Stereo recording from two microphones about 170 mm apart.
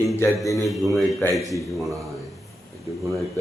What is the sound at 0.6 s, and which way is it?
Speech, centre (ahead or behind).